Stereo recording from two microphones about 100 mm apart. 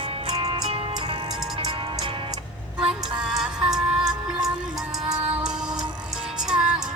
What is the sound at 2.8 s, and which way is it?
Music, 10° right (ahead or behind).